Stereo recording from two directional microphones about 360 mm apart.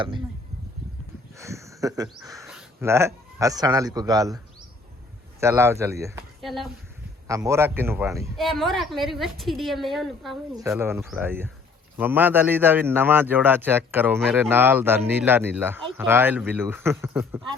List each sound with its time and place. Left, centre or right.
1.4 s speech: centre
5.4 s a man's voice: centre